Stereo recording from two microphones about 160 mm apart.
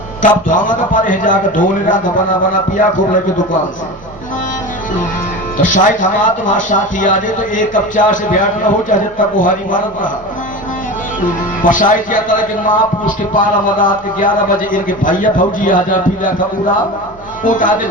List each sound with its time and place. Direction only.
0.2 s a man's voice: 55° left (ahead or behind)
5.6 s a man's voice: 55° left (ahead or behind)
11.6 s a man's voice: 55° left (ahead or behind)
17.4 s a man's voice: 55° left (ahead or behind)